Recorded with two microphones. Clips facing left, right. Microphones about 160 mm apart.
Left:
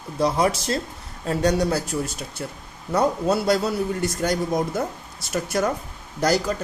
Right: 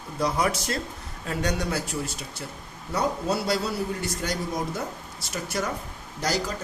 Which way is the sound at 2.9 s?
50° left (ahead or behind).